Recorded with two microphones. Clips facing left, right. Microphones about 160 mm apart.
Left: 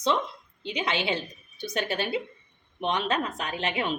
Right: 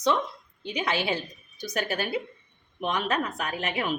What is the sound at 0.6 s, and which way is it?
A woman's voice, 25° left (ahead or behind).